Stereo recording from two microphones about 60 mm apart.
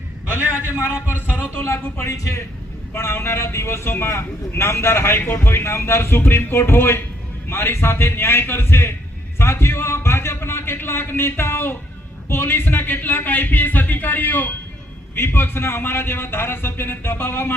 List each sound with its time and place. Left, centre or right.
0.8 s a man's voice: left
1.1 s speech: right
1.5 s a man's voice: left
2.0 s a man's voice: left
2.9 s a man's voice: left